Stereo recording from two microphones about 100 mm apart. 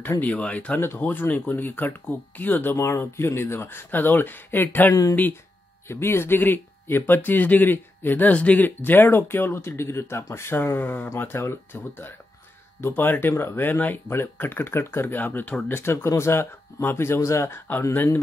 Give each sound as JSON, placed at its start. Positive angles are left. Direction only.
{"t": 0.2, "sound": "speech", "side_deg": 15}